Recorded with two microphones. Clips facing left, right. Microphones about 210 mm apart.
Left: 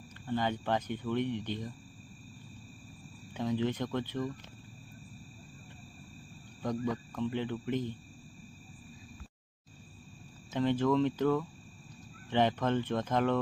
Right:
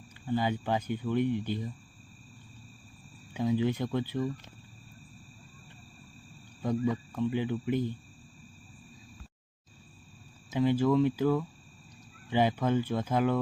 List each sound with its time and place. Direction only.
0.3 s speech: 10° right (ahead or behind)
3.3 s speech: 10° right (ahead or behind)
6.6 s speech: 5° right (ahead or behind)
10.5 s speech: 10° right (ahead or behind)